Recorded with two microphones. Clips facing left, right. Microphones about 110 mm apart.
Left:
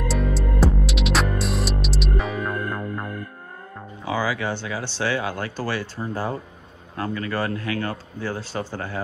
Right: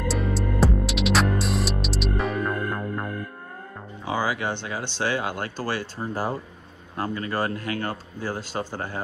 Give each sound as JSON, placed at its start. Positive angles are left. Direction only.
{"t": 0.1, "sound": "music", "side_deg": 0}
{"t": 4.1, "sound": "speech", "side_deg": -20}
{"t": 5.9, "sound": "a man's voice", "side_deg": -35}
{"t": 8.6, "sound": "speech", "side_deg": -20}